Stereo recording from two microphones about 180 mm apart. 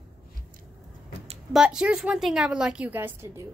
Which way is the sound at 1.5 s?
5° right (ahead or behind).